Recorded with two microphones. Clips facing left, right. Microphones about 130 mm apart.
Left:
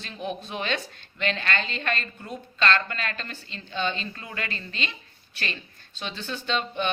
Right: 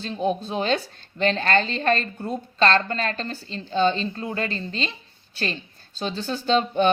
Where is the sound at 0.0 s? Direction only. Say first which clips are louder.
Right 8 dB; 30° right (ahead or behind).